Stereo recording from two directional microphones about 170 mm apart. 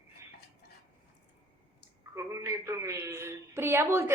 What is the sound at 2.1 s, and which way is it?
A woman's voice, 15° right (ahead or behind).